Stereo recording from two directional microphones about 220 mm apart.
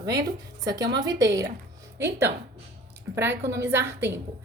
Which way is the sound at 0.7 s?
20° right (ahead or behind).